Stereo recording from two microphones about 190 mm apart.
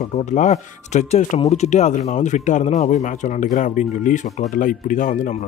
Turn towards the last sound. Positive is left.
turn(degrees=40)  # may be behind; listen again after turning